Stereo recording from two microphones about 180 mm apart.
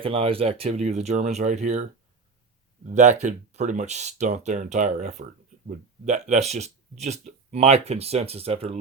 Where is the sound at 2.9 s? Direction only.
40° right (ahead or behind).